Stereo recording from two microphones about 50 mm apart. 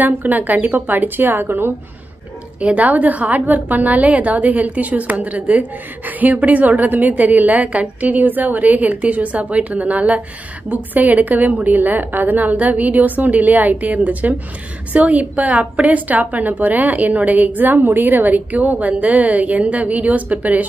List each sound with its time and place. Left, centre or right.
0.0 s a woman's voice: right
2.6 s a woman's voice: right